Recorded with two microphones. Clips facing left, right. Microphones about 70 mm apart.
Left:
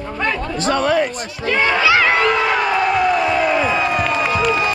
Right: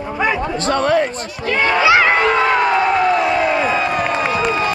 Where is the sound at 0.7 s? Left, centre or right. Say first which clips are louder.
Right 1 dB; right.